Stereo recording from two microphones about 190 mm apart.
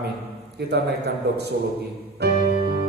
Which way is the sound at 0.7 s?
60° right (ahead or behind).